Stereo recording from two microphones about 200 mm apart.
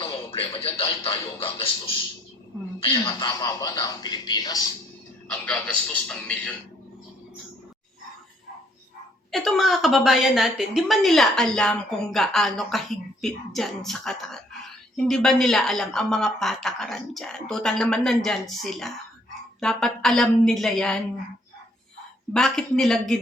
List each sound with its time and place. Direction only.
0.0 s speech: 25° left (ahead or behind)
2.8 s speech: 20° left (ahead or behind)
5.3 s a man's voice: 5° left (ahead or behind)
9.3 s a woman's voice: centre (ahead or behind)
22.3 s a woman's voice: centre (ahead or behind)